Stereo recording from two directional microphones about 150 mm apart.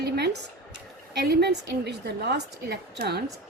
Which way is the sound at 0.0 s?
90° right.